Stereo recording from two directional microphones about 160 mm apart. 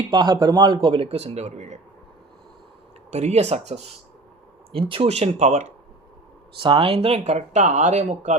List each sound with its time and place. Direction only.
0.1 s speech: 30° right (ahead or behind); by 1.8 s 45° right (ahead or behind)
3.1 s speech: 45° right (ahead or behind)
6.6 s speech: 35° right (ahead or behind)